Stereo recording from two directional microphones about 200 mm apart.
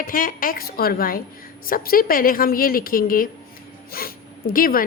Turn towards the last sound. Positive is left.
turn(degrees=45)  # may be behind; listen again after turning